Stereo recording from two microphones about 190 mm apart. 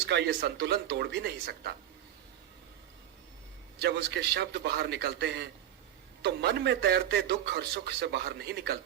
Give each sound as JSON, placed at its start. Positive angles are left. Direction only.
{"t": 0.1, "sound": "a man's voice", "side_deg": -65}
{"t": 3.8, "sound": "a man's voice", "side_deg": -65}